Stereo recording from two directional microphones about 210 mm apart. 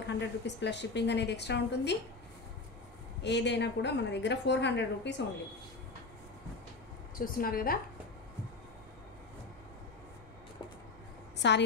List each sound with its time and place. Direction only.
0.0 s a woman's voice: 55° left (ahead or behind)
3.2 s a woman's voice: 55° left (ahead or behind)
7.2 s a woman's voice: 45° left (ahead or behind)
11.3 s a woman's voice: 55° left (ahead or behind)